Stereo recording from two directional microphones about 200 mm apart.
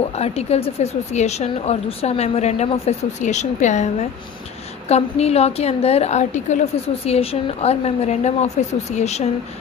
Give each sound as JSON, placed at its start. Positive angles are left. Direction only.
{"t": 0.2, "sound": "a woman's voice", "side_deg": 30}